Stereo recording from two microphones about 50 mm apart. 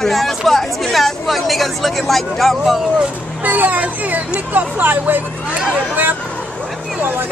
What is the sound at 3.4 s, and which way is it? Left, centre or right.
Speech, right.